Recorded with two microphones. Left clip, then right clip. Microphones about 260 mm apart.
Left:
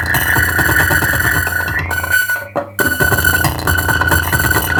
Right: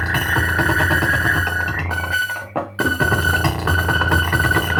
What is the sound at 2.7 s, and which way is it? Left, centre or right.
Music, left.